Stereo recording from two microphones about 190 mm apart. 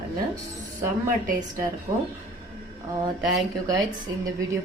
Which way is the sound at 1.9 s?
25° right (ahead or behind).